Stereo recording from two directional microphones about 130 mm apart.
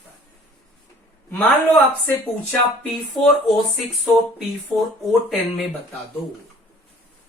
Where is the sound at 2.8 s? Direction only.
Centre (ahead or behind).